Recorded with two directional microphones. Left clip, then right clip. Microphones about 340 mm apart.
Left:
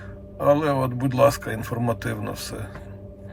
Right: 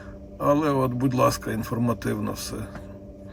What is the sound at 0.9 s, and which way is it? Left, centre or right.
Speech, left.